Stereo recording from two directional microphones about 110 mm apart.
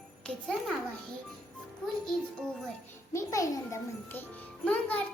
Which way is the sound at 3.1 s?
30° left (ahead or behind).